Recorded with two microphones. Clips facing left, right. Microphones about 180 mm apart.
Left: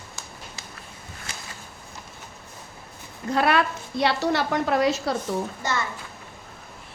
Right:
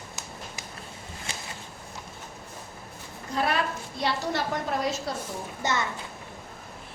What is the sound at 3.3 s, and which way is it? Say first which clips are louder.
A woman's voice: left 5 dB; 75° left (ahead or behind).